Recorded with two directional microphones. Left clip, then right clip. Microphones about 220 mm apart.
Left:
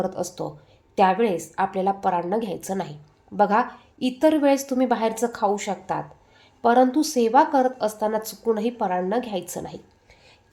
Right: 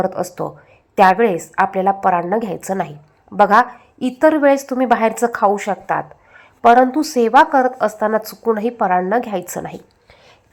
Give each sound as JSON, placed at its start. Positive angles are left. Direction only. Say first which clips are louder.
{"t": 0.0, "sound": "a woman's voice", "louder": "right 7 dB", "side_deg": -20}